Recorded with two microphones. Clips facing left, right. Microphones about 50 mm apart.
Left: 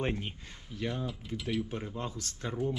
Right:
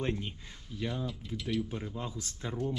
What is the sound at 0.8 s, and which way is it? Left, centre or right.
Speech, centre.